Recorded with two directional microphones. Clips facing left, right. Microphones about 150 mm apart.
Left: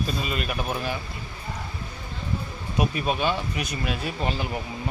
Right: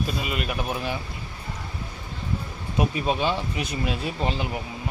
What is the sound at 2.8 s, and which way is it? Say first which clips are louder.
Speech: right 1 dB; 25° right (ahead or behind).